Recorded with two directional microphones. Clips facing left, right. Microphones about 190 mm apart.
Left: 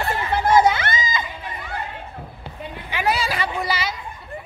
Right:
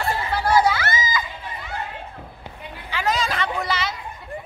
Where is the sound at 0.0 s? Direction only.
20° left (ahead or behind).